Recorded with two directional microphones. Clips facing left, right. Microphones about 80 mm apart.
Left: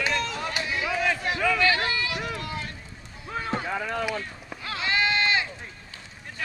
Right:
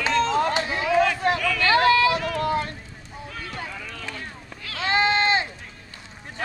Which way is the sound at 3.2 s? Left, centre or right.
Left.